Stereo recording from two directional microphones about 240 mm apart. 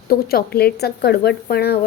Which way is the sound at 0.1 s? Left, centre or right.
Left.